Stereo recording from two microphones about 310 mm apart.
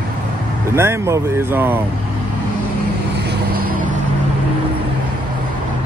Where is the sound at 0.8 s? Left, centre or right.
Centre.